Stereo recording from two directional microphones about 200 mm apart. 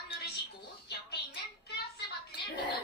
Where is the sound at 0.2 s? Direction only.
55° left (ahead or behind).